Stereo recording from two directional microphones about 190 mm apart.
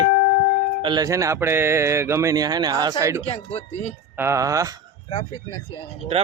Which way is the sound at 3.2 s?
35° left (ahead or behind).